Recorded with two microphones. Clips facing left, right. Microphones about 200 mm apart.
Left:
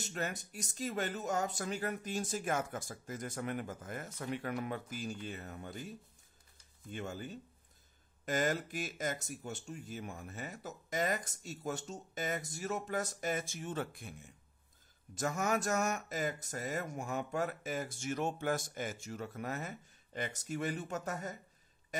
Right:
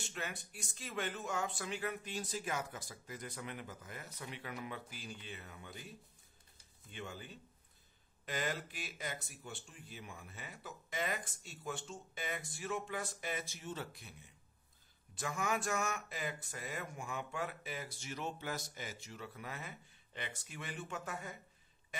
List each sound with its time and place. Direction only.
0.0 s speech: 40° left (ahead or behind)
6.9 s speech: 45° left (ahead or behind)